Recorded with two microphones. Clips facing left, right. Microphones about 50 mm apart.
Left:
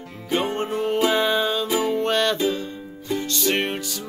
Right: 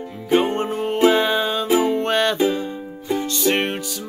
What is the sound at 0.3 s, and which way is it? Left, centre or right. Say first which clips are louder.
Music: right 5 dB; centre.